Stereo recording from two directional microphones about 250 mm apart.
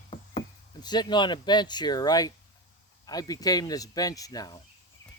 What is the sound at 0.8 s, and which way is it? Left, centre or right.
Speech, centre.